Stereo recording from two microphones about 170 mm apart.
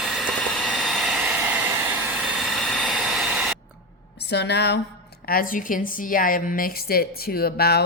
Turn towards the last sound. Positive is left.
turn(degrees=65)  # may be behind; listen again after turning